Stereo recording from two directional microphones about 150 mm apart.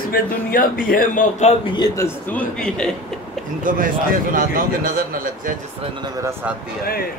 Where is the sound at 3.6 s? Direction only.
65° right (ahead or behind).